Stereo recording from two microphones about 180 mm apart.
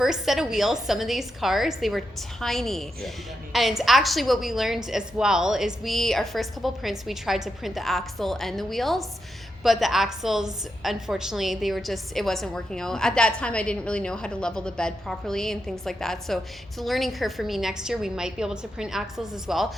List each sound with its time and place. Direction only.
0.0 s a woman's voice: centre (ahead or behind)